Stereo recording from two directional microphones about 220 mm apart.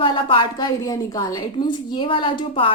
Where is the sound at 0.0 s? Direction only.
20° left (ahead or behind).